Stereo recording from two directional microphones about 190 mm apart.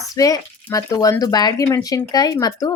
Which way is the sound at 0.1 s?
20° left (ahead or behind).